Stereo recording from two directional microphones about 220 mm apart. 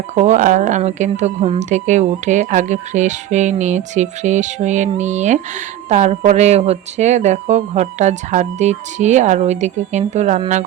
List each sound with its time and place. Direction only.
0.1 s speech: 30° right (ahead or behind)